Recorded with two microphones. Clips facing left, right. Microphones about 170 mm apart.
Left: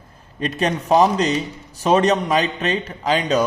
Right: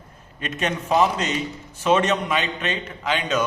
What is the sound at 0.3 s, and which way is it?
A man's voice, 35° left (ahead or behind).